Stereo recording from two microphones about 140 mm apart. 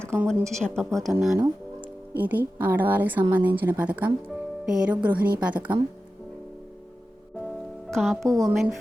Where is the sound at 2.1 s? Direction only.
15° right (ahead or behind).